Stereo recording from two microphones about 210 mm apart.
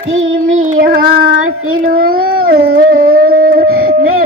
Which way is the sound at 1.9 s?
45° right (ahead or behind).